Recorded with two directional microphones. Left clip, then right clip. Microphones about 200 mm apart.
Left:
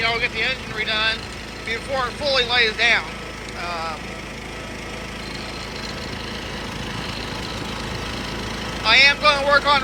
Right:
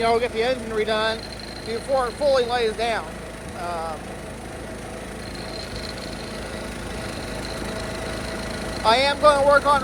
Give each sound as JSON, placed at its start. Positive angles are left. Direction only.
{"t": 0.0, "sound": "speech", "side_deg": -25}
{"t": 8.8, "sound": "speech", "side_deg": -20}